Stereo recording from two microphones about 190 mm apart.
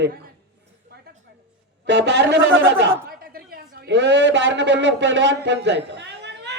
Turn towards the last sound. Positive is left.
turn(degrees=-65)  # may be behind; listen again after turning